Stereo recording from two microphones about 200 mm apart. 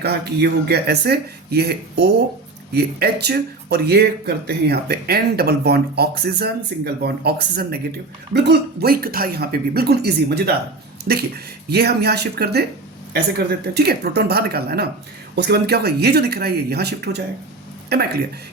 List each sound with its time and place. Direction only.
0.0 s speech: 55° right (ahead or behind)
13.7 s speech: 55° right (ahead or behind)